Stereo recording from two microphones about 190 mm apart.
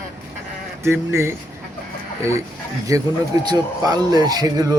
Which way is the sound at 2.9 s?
15° right (ahead or behind).